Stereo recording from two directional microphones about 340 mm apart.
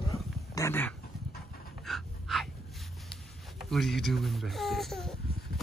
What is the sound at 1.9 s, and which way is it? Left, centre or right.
Dog, centre.